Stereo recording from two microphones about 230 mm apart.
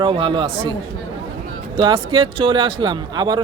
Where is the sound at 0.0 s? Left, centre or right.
Right.